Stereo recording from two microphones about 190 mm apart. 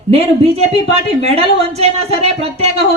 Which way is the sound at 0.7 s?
35° right (ahead or behind).